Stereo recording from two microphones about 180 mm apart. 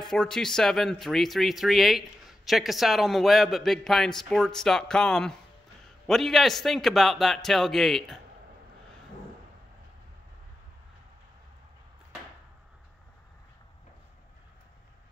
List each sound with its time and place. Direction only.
0.1 s speech: 5° left (ahead or behind)